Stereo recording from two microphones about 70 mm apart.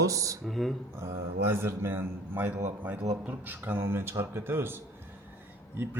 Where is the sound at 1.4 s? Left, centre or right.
Right.